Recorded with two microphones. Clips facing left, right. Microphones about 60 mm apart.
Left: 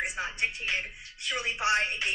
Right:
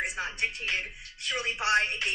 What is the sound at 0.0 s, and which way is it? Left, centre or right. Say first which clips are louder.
A woman's voice: even; centre.